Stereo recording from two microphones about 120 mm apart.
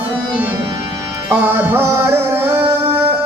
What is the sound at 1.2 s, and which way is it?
Music, 15° right (ahead or behind).